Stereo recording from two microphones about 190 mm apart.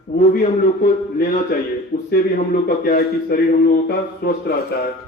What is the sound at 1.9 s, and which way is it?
Speech, 40° left (ahead or behind).